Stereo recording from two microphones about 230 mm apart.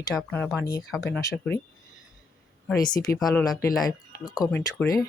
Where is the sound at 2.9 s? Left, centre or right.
Centre.